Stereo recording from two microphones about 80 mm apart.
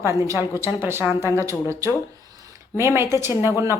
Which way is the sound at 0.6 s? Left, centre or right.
Right.